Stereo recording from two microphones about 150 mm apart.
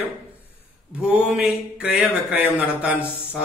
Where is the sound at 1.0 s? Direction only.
5° right (ahead or behind).